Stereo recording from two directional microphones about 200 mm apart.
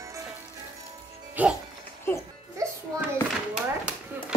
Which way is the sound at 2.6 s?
15° right (ahead or behind).